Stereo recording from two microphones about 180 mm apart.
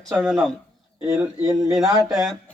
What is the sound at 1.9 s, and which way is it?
Speech, 20° right (ahead or behind).